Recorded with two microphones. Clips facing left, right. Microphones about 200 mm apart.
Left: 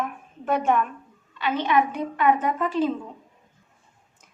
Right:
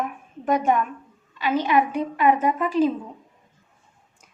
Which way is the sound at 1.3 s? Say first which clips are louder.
Right 2 dB; 10° right (ahead or behind).